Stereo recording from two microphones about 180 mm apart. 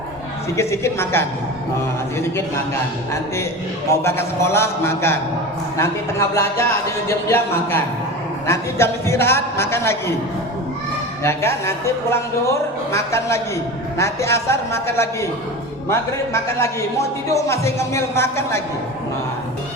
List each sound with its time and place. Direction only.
0.5 s a man's voice: 15° left (ahead or behind)
4.0 s a man's voice: 15° left (ahead or behind)
11.2 s a man's voice: 15° left (ahead or behind)